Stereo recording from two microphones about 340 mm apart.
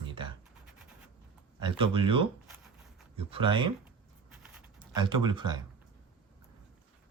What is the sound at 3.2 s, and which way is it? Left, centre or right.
Speech, centre.